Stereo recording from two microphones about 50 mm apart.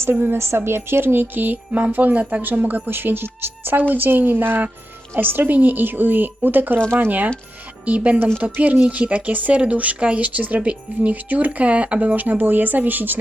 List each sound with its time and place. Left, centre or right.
0.0 s speech: right
0.3 s speech: right
7.9 s speech: right